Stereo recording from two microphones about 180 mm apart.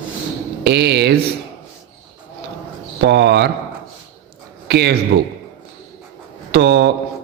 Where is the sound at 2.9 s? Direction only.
75° right (ahead or behind).